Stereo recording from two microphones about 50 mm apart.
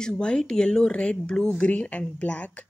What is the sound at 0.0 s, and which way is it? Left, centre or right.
Speech, centre.